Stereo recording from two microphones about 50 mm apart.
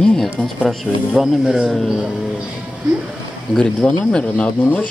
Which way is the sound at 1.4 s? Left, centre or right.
Centre.